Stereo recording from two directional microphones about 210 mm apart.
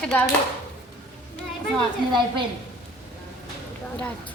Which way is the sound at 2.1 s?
25° right (ahead or behind).